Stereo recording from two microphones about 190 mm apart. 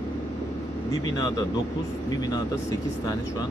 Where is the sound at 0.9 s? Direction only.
20° left (ahead or behind).